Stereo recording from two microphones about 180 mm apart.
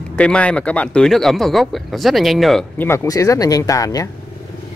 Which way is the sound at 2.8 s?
15° left (ahead or behind).